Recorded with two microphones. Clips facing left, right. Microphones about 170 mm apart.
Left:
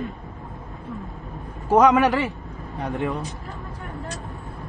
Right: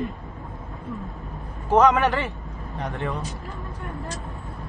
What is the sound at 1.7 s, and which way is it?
Speech, 10° left (ahead or behind).